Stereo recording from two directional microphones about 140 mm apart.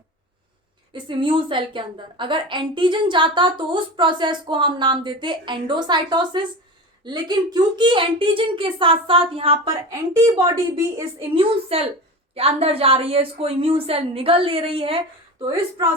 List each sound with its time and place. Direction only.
0.9 s a woman's voice: 35° right (ahead or behind)
10.2 s a woman's voice: 20° right (ahead or behind)
11.3 s a woman's voice: 45° right (ahead or behind)